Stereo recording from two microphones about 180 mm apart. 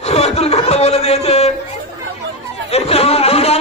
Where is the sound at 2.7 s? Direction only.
35° left (ahead or behind).